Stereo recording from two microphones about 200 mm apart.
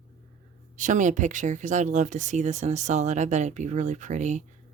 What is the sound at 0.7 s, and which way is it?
Speech, 40° right (ahead or behind).